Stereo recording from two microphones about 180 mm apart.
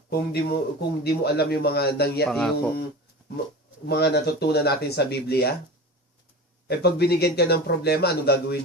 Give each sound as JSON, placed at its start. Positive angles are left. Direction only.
{"t": 0.1, "sound": "speech", "side_deg": 65}
{"t": 2.3, "sound": "speech", "side_deg": 5}
{"t": 3.8, "sound": "speech", "side_deg": 65}
{"t": 6.7, "sound": "speech", "side_deg": 65}